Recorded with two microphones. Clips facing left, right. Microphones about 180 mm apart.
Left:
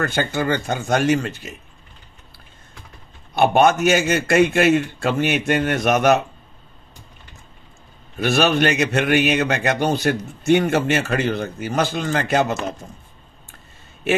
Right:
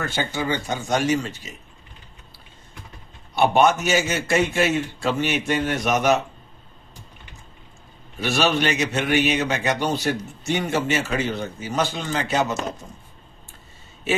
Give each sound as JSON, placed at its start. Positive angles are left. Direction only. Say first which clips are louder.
{"t": 0.0, "sound": "a man's voice", "louder": "left 4 dB", "side_deg": 55}
{"t": 3.3, "sound": "a man's voice", "louder": "left 2 dB", "side_deg": 55}
{"t": 8.2, "sound": "a man's voice", "louder": "left 4 dB", "side_deg": 55}